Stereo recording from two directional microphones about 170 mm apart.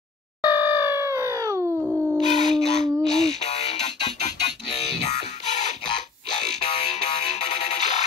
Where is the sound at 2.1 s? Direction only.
40° left (ahead or behind).